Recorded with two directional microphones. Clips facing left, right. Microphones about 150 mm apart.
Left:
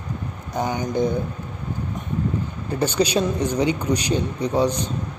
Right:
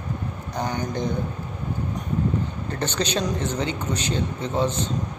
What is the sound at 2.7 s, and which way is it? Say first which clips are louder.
A man's voice: left 6 dB; 10° left (ahead or behind).